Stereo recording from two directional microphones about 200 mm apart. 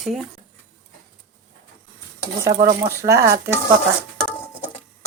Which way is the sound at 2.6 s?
15° right (ahead or behind).